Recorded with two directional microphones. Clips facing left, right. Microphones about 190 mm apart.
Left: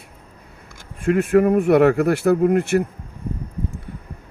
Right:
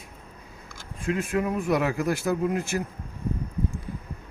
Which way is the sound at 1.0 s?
60° left (ahead or behind).